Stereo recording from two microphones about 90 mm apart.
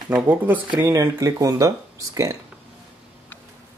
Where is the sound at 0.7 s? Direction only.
35° right (ahead or behind).